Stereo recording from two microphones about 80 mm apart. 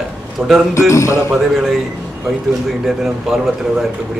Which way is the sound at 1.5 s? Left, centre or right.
Centre.